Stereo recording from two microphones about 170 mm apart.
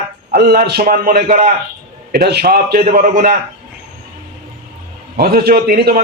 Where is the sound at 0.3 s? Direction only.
65° right (ahead or behind).